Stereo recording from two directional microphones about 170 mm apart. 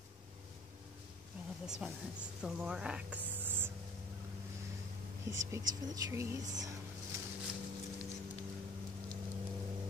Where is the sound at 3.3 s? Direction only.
10° right (ahead or behind).